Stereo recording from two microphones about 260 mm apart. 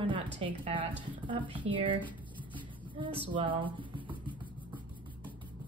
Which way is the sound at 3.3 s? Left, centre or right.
Centre.